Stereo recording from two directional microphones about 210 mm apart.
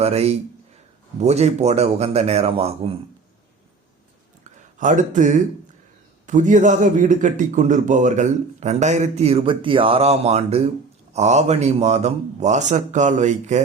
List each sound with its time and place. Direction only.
0.0 s a man's voice: 30° right (ahead or behind)
4.8 s a man's voice: 35° right (ahead or behind)